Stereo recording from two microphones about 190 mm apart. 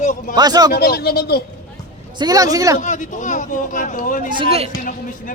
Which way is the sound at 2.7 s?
40° left (ahead or behind).